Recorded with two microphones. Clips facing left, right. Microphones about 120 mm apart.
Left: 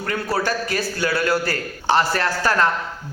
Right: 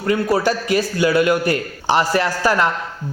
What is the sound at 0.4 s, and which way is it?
A man's voice, 15° right (ahead or behind).